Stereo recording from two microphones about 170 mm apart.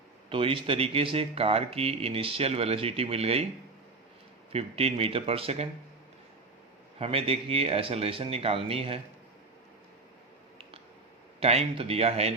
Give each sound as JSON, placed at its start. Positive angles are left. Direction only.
{"t": 0.3, "sound": "speech", "side_deg": -30}
{"t": 4.5, "sound": "speech", "side_deg": -35}
{"t": 7.0, "sound": "speech", "side_deg": -35}
{"t": 11.3, "sound": "speech", "side_deg": -35}